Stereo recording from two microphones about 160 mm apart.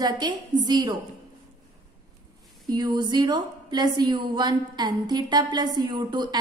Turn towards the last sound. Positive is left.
turn(degrees=-25)  # may be behind; listen again after turning